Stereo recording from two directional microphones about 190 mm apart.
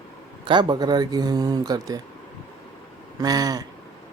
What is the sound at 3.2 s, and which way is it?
Speech, 20° right (ahead or behind).